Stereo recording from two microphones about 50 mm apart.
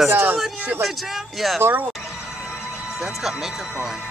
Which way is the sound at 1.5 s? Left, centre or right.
Right.